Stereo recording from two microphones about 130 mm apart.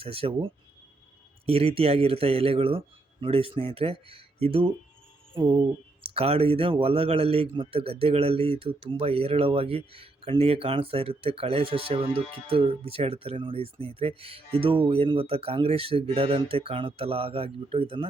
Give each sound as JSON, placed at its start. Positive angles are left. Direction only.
{"t": 0.0, "sound": "speech", "side_deg": -45}